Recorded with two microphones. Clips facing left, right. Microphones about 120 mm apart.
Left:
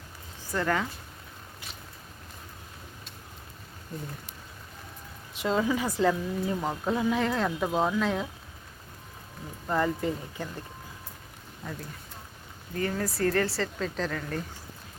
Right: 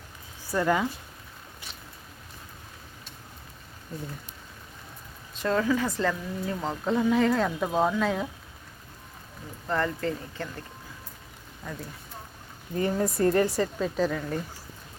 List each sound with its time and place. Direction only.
0.5 s speech: 10° right (ahead or behind)
5.3 s speech: 15° left (ahead or behind); by 8.3 s centre (ahead or behind)
9.6 s speech: 10° left (ahead or behind)
12.7 s speech: 20° right (ahead or behind)